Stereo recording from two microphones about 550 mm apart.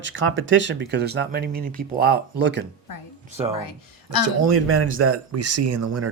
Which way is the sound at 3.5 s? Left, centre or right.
Left.